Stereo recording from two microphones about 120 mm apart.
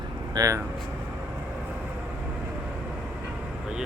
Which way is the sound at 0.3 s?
30° right (ahead or behind).